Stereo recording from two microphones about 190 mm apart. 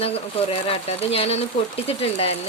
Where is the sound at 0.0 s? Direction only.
30° left (ahead or behind).